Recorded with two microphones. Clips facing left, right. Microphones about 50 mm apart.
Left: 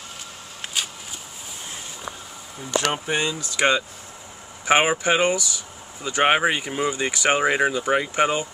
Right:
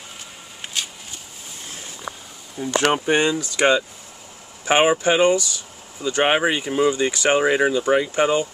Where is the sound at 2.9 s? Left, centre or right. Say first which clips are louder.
Right 6 dB; right.